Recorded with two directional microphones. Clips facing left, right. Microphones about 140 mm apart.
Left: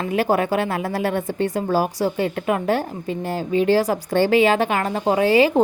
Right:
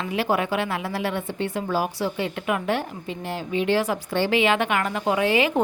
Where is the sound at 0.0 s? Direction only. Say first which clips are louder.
Left 4 dB; 45° left (ahead or behind).